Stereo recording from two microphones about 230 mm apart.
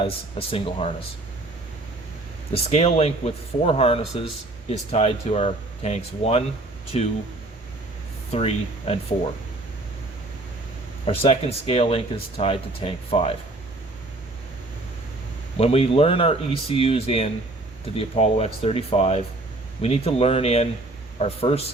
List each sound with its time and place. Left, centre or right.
0.0 s speech: left
2.5 s speech: left
8.3 s speech: left
11.0 s speech: left
15.5 s speech: left